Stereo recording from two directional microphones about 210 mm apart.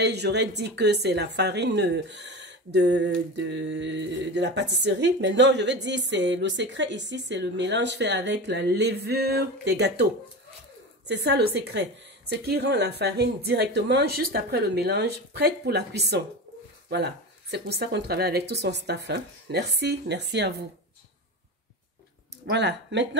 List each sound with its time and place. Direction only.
0.0 s a woman's voice: 55° right (ahead or behind)
11.1 s a woman's voice: 50° right (ahead or behind)
22.5 s a woman's voice: 55° right (ahead or behind)